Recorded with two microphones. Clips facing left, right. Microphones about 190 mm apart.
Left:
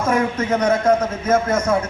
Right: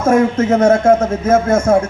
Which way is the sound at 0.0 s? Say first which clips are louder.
Right 7 dB; 45° right (ahead or behind).